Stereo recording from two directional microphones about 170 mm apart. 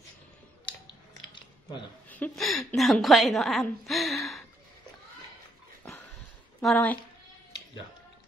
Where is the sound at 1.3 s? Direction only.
30° left (ahead or behind).